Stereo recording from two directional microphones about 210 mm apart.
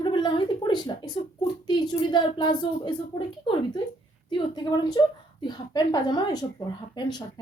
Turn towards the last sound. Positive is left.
turn(degrees=20)  # may be behind; listen again after turning